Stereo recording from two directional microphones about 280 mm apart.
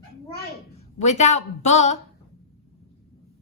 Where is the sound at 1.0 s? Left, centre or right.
Left.